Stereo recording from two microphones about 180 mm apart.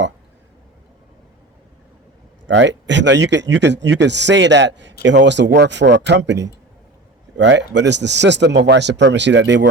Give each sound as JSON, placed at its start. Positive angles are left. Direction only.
{"t": 2.5, "sound": "speech", "side_deg": -80}